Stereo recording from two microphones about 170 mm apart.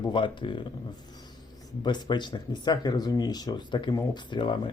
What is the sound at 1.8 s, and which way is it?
Speech, 25° left (ahead or behind).